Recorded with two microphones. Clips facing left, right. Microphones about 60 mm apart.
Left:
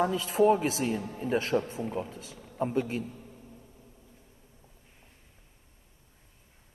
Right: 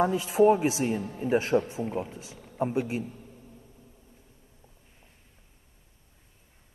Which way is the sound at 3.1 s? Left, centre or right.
Left.